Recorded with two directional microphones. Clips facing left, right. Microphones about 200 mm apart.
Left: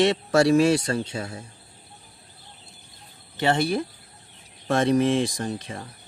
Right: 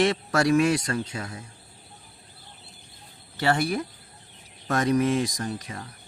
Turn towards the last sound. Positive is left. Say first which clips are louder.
# left 2 dB
turn(degrees=30)  # may be behind; listen again after turning